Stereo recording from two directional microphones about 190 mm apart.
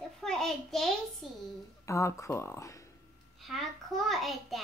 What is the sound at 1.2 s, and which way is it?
Speech, centre (ahead or behind).